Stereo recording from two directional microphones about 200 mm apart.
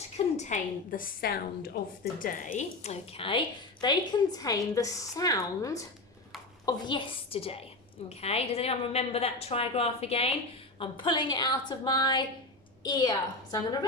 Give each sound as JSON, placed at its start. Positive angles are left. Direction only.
{"t": 0.3, "sound": "a woman's voice", "side_deg": 35}
{"t": 2.6, "sound": "a woman's voice", "side_deg": 30}